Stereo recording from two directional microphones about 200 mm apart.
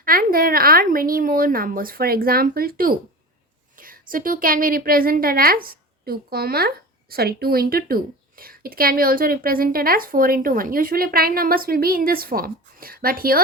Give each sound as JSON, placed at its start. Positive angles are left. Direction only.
{"t": 0.0, "sound": "a woman's voice", "side_deg": -45}